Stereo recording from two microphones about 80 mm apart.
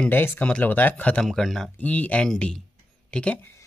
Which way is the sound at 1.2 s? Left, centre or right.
Centre.